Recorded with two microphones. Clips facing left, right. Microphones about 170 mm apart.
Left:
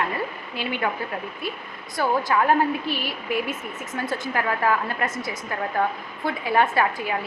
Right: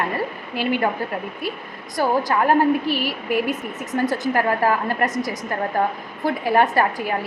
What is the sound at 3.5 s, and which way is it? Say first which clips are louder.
A woman's voice: right 6 dB; 40° right (ahead or behind).